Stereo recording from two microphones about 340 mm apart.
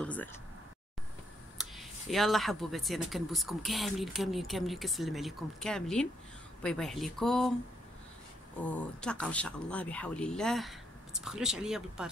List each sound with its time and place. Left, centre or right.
0.0 s a sound: centre
1.6 s speech: centre
8.6 s speech: centre